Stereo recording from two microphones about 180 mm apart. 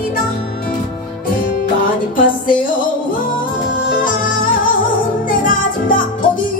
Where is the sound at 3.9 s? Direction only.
50° left (ahead or behind).